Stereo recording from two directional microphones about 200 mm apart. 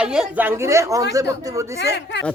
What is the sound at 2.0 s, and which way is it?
Speech, 60° left (ahead or behind).